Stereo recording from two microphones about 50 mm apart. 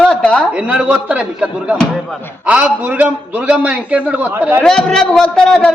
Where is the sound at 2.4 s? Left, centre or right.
Right.